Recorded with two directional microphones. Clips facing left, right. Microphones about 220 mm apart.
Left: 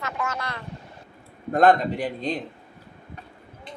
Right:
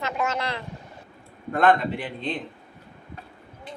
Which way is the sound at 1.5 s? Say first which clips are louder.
Left 2 dB; 40° left (ahead or behind).